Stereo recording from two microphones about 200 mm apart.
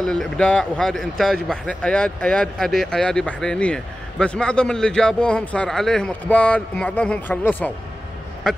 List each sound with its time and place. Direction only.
0.0 s a man's voice: 5° left (ahead or behind)